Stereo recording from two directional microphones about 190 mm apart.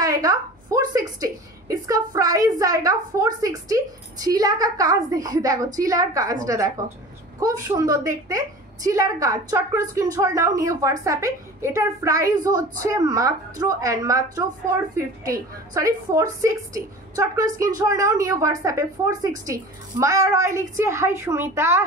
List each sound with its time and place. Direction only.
0.0 s a woman's voice: 20° right (ahead or behind)